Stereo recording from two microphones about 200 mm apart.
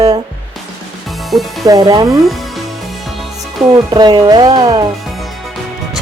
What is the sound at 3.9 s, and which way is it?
Speech, 20° right (ahead or behind).